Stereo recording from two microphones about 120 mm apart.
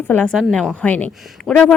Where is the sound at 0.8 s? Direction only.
15° left (ahead or behind).